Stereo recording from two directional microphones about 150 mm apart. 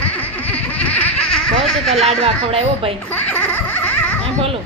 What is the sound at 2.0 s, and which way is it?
Speech, 45° right (ahead or behind).